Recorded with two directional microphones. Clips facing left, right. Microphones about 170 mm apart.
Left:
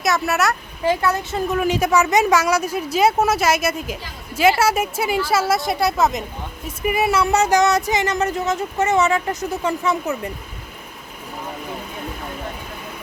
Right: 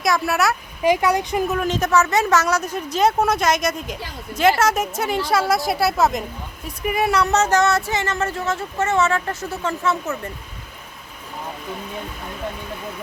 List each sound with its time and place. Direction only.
0.0 s speech: centre (ahead or behind)
0.8 s speech: 15° right (ahead or behind)
1.5 s speech: 5° left (ahead or behind)